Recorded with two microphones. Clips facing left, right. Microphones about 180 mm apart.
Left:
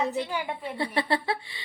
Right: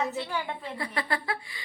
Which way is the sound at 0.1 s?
15° left (ahead or behind).